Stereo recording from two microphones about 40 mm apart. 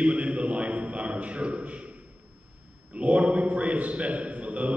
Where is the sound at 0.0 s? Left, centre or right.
Right.